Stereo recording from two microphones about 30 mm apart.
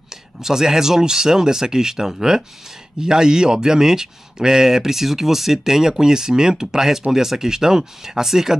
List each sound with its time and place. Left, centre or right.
0.4 s speech: centre